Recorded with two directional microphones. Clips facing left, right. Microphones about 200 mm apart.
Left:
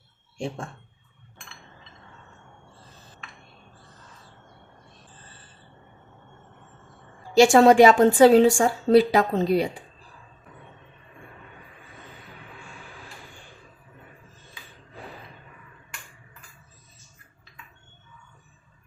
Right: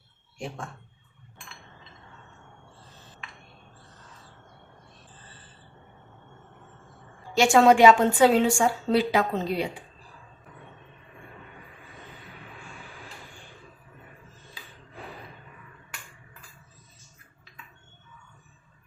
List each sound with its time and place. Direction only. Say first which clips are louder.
0.3 s speech: left 5 dB; 30° left (ahead or behind)
7.3 s a woman's voice: left 4 dB; 35° left (ahead or behind)